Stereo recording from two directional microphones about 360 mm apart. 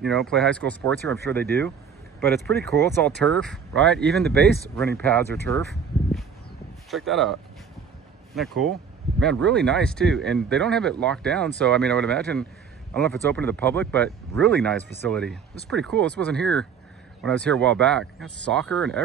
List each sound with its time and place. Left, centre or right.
0.0 s speech: centre
6.9 s speech: centre
8.4 s speech: centre